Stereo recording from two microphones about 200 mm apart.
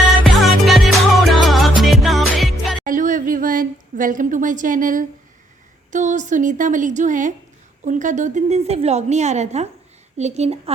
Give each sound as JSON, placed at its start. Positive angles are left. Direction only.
{"t": 0.6, "sound": "music", "side_deg": 0}
{"t": 2.8, "sound": "a sound", "side_deg": -40}
{"t": 5.9, "sound": "a woman's voice", "side_deg": -40}